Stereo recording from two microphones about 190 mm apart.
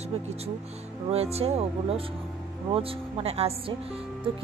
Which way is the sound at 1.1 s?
35° right (ahead or behind).